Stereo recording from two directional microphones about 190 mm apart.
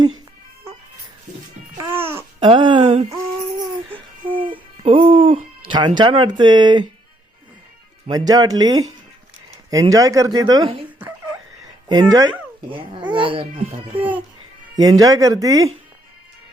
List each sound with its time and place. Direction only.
1.9 s babbling: 10° right (ahead or behind)
2.4 s a sound: 25° right (ahead or behind)
4.8 s music: 30° right (ahead or behind)
5.6 s speech: 25° right (ahead or behind)
8.1 s speech: 20° right (ahead or behind)
13.9 s speech: 10° right (ahead or behind)
14.8 s speech: 20° right (ahead or behind)